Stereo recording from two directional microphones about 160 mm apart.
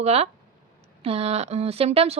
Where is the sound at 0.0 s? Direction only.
40° right (ahead or behind).